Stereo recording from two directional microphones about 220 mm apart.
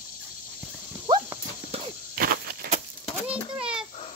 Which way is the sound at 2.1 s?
40° right (ahead or behind).